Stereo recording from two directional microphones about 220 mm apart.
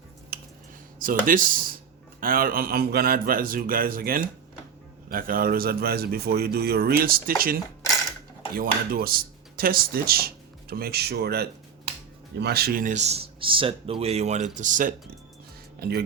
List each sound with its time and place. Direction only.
0.3 s a sound: 45° right (ahead or behind)
0.9 s a man's voice: 40° right (ahead or behind)
15.8 s a man's voice: 45° right (ahead or behind)